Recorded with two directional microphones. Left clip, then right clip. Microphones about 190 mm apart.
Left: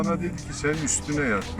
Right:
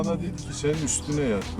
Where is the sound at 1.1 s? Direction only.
15° right (ahead or behind).